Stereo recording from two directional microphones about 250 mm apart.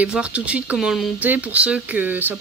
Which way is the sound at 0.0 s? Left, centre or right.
Centre.